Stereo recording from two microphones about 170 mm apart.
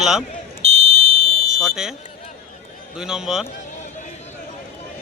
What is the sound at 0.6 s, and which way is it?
Fire alarm, 40° right (ahead or behind).